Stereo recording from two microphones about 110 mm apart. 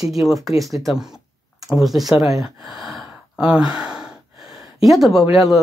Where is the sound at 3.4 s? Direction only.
10° right (ahead or behind).